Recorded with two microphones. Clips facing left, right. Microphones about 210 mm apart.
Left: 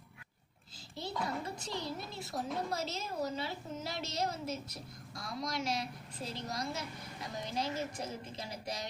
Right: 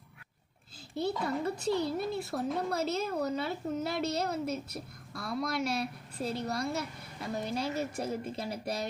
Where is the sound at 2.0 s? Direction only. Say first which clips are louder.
Right 8 dB; 60° right (ahead or behind).